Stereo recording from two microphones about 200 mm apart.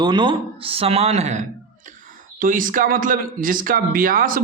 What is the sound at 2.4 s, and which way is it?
Speech, 45° right (ahead or behind).